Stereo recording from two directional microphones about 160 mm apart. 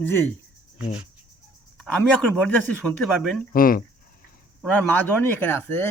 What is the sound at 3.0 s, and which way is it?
Speech, 5° right (ahead or behind).